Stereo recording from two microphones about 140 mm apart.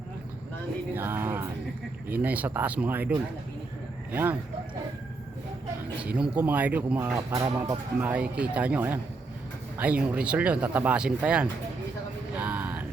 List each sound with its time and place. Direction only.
0.9 s speech: 15° right (ahead or behind)
6.0 s speech: 10° right (ahead or behind); by 7.6 s 25° right (ahead or behind)
7.9 s speech: 10° right (ahead or behind)
12.4 s music: 15° right (ahead or behind)